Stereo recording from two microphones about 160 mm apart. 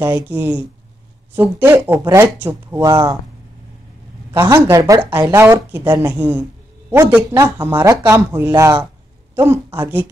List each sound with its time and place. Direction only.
0.0 s speech: 15° right (ahead or behind)
4.3 s a woman's voice: 15° right (ahead or behind)